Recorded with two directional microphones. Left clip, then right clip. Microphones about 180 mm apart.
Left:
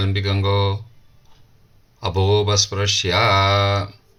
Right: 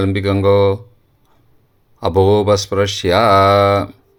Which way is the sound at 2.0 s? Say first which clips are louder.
Right 7 dB; 55° right (ahead or behind).